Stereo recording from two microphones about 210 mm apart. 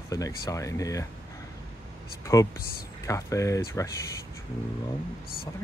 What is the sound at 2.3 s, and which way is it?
Speech, 15° left (ahead or behind).